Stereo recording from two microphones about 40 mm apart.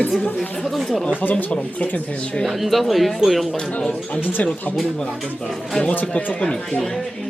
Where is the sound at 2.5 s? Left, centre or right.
Centre.